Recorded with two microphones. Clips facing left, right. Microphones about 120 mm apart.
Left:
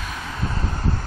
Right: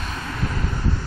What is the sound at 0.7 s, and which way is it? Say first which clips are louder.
Vehicle: even; 40° left (ahead or behind).